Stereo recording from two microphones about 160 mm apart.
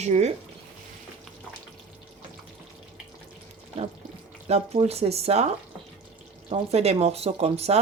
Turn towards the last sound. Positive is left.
turn(degrees=-40)  # may be behind; listen again after turning